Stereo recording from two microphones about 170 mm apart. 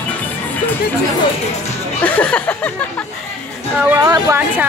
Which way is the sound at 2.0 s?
10° left (ahead or behind).